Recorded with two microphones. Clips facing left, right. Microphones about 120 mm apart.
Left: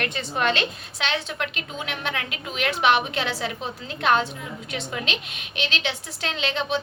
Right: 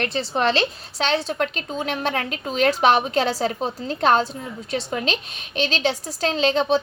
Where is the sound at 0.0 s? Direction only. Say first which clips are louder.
Right 3 dB; 35° right (ahead or behind).